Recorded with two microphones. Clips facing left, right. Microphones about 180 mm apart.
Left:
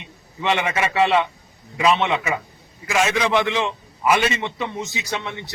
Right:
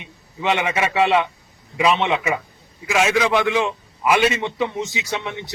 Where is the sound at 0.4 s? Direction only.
15° right (ahead or behind).